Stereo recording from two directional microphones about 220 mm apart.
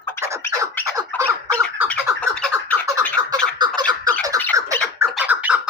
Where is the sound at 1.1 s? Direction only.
5° left (ahead or behind).